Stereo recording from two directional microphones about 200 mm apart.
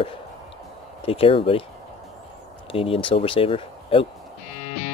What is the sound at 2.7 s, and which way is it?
Speech, 30° left (ahead or behind).